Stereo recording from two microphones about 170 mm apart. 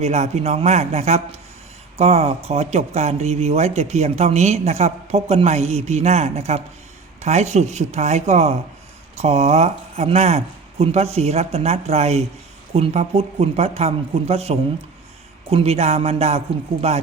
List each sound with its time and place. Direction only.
0.0 s speech: 40° right (ahead or behind)